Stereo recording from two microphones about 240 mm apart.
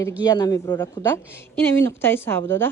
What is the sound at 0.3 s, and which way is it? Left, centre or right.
Speech, centre.